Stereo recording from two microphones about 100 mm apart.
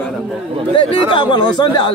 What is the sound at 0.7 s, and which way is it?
Speech, 60° left (ahead or behind).